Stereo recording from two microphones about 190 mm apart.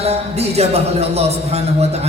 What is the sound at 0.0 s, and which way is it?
Speech, 35° right (ahead or behind).